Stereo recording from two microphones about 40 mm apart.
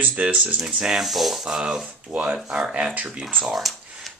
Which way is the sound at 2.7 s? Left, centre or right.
Right.